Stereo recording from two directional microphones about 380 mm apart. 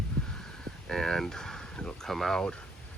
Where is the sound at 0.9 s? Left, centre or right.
Centre.